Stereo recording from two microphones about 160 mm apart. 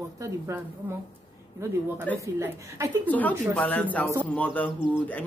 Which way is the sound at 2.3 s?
15° right (ahead or behind).